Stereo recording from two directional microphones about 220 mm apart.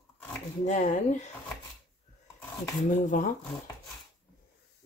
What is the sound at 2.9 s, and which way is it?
Speech, 35° left (ahead or behind).